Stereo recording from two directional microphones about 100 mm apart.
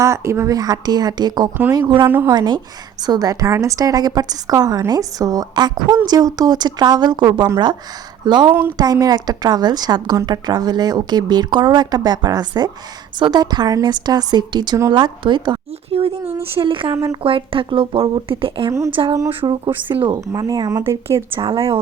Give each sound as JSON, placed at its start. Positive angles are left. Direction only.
{"t": 0.0, "sound": "a woman's voice", "side_deg": -30}
{"t": 2.0, "sound": "a woman's voice", "side_deg": -25}
{"t": 2.3, "sound": "a woman's voice", "side_deg": -45}
{"t": 15.9, "sound": "speech", "side_deg": -75}
{"t": 16.6, "sound": "speech", "side_deg": -60}
{"t": 16.9, "sound": "a woman's voice", "side_deg": -30}
{"t": 17.2, "sound": "speech", "side_deg": -60}
{"t": 19.0, "sound": "speech", "side_deg": -45}
{"t": 19.4, "sound": "speech", "side_deg": -60}
{"t": 20.3, "sound": "a woman's voice", "side_deg": -35}
{"t": 20.8, "sound": "a woman's voice", "side_deg": -30}
{"t": 21.3, "sound": "speech", "side_deg": -65}